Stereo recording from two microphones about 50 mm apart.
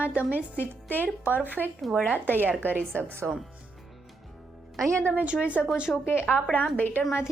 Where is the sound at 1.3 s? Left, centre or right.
Right.